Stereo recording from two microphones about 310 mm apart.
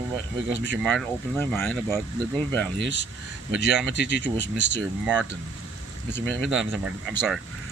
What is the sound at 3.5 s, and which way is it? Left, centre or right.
Speech, right.